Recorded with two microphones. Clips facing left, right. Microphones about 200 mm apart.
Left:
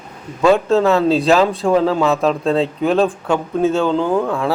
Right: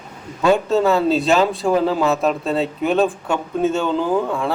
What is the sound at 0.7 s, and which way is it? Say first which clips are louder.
Speech: left 2 dB; 5° right (ahead or behind).